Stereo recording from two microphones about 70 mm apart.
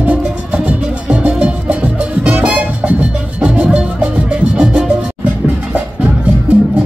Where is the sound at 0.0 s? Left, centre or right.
Centre.